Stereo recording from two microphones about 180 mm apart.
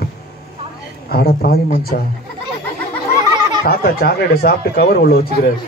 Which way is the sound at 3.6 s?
60° left (ahead or behind).